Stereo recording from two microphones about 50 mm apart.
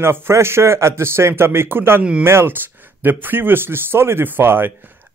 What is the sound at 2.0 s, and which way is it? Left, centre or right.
Speech, right.